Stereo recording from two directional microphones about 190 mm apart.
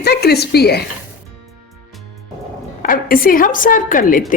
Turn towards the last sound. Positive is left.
turn(degrees=45)  # may be behind; listen again after turning